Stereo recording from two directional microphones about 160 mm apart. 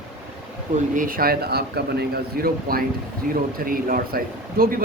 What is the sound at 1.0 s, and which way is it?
Speech, 60° right (ahead or behind).